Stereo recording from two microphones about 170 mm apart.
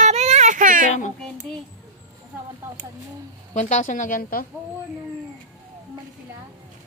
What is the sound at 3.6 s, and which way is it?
Speech, 45° left (ahead or behind).